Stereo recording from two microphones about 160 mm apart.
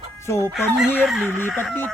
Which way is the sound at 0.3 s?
15° left (ahead or behind).